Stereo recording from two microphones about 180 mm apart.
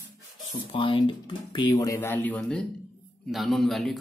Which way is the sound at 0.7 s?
30° left (ahead or behind).